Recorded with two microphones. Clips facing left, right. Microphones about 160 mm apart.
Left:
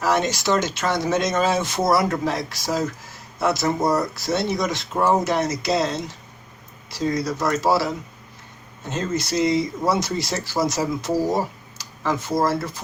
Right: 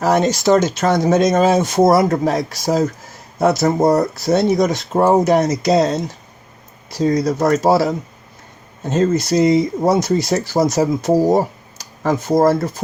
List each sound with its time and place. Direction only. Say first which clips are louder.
0.0 s speech: right 6 dB; 45° right (ahead or behind)